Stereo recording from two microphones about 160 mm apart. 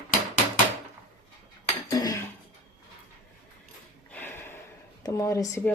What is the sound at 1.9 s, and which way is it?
Dishes, 25° left (ahead or behind).